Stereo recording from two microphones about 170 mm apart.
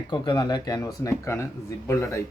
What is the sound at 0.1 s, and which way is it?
Speech, 25° left (ahead or behind).